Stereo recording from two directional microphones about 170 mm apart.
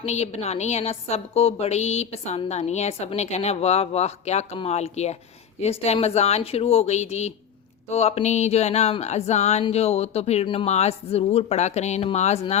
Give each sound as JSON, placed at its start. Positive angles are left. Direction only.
{"t": 0.0, "sound": "a woman's voice", "side_deg": 40}